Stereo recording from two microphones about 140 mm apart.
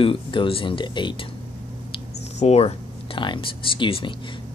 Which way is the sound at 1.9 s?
45° left (ahead or behind).